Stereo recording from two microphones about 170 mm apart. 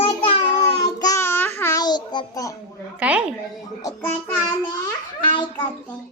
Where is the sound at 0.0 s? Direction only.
30° left (ahead or behind).